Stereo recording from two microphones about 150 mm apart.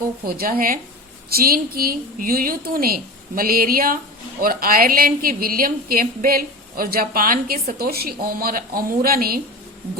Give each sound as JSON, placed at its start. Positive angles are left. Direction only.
{"t": 0.3, "sound": "speech", "side_deg": -85}
{"t": 1.3, "sound": "a woman's voice", "side_deg": -85}